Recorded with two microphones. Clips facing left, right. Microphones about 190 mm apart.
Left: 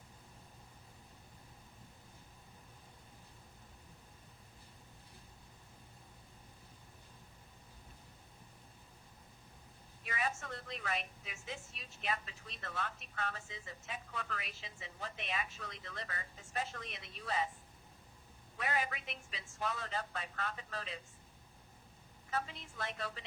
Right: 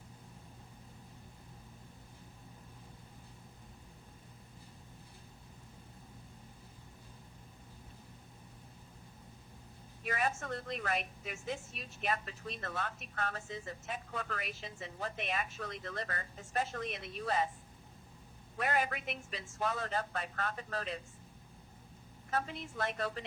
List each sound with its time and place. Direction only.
10.0 s a woman's voice: 50° right (ahead or behind)
18.5 s a woman's voice: 50° right (ahead or behind)
22.3 s a woman's voice: 50° right (ahead or behind)